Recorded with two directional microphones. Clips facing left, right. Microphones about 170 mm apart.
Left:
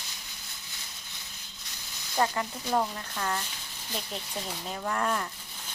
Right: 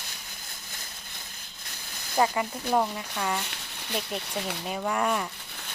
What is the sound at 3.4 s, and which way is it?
Speech, 70° right (ahead or behind).